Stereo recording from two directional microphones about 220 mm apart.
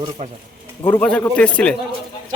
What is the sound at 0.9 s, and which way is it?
Speech, 5° left (ahead or behind).